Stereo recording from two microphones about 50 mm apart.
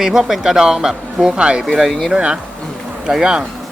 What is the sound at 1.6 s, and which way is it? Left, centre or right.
Speech, centre.